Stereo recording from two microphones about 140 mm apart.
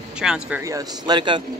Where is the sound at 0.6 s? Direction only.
25° right (ahead or behind).